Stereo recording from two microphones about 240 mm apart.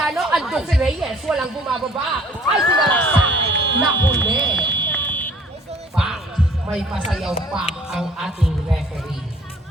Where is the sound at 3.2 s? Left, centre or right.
Right.